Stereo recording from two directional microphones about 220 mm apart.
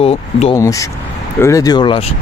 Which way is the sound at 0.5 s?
15° left (ahead or behind).